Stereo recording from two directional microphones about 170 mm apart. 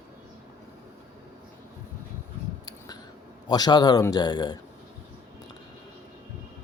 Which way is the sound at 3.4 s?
25° left (ahead or behind).